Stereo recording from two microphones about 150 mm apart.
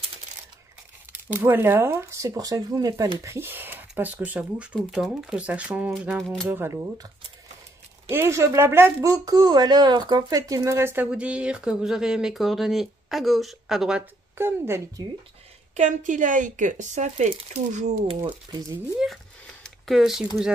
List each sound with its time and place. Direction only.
1.3 s speech: 15° right (ahead or behind)
6.5 s speech: 15° right (ahead or behind)
8.1 s speech: 15° right (ahead or behind)
15.7 s speech: 55° right (ahead or behind)
18.2 s speech: 15° right (ahead or behind)
19.4 s a sound: 5° left (ahead or behind)